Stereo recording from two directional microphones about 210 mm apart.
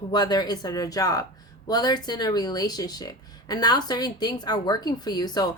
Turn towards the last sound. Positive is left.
turn(degrees=20)  # may be behind; listen again after turning